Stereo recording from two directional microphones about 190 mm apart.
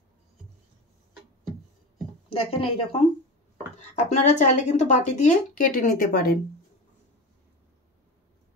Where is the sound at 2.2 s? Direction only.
30° left (ahead or behind); by 6.3 s 50° left (ahead or behind).